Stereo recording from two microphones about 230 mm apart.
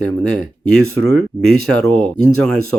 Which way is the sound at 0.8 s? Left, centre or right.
Right.